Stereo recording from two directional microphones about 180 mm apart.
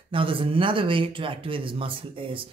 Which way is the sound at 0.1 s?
30° right (ahead or behind).